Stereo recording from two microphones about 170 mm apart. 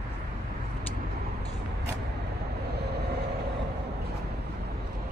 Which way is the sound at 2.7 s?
75° right (ahead or behind).